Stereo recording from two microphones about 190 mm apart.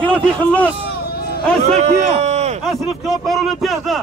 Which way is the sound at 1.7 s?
35° right (ahead or behind).